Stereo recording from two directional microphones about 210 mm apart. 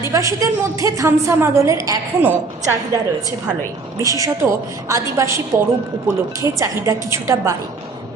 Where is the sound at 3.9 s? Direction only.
15° right (ahead or behind).